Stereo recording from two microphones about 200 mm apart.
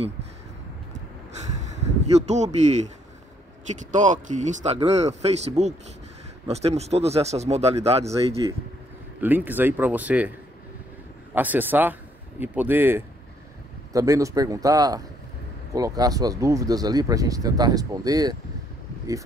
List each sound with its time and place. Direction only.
2.2 s speech: 35° right (ahead or behind)
3.9 s speech: 40° right (ahead or behind)
9.2 s speech: 10° right (ahead or behind)
11.3 s speech: 10° right (ahead or behind)